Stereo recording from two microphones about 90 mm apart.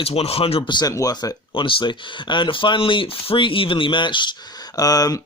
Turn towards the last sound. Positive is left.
turn(degrees=45)  # may be behind; listen again after turning